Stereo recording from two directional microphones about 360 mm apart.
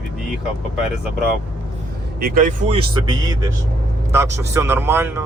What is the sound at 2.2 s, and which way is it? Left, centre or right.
Speech, right.